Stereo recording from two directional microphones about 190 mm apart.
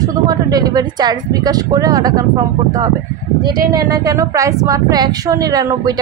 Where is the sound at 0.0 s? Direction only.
20° right (ahead or behind).